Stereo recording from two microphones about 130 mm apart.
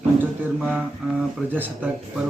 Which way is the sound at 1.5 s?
15° right (ahead or behind).